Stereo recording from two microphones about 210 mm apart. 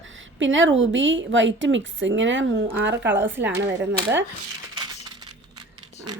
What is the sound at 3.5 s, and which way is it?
Speech, 10° right (ahead or behind).